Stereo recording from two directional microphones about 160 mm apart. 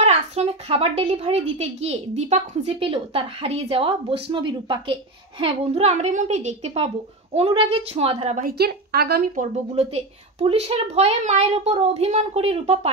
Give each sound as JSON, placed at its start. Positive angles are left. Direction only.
{"t": 0.0, "sound": "a child's voice", "side_deg": -40}
{"t": 5.4, "sound": "a woman's voice", "side_deg": -40}
{"t": 8.5, "sound": "a woman's voice", "side_deg": -75}
{"t": 9.3, "sound": "a child's voice", "side_deg": -45}